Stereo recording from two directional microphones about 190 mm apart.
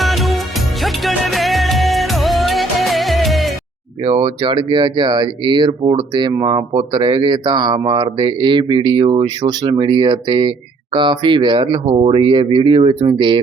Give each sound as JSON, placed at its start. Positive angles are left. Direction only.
{"t": 0.0, "sound": "music", "side_deg": 0}
{"t": 4.0, "sound": "speech", "side_deg": -25}